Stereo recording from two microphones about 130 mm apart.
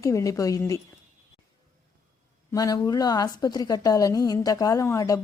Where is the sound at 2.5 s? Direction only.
25° left (ahead or behind).